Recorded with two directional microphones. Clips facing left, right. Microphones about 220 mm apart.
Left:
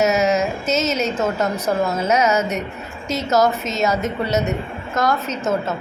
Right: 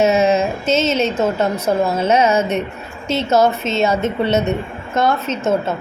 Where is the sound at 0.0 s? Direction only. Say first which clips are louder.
Right 3 dB; 30° right (ahead or behind).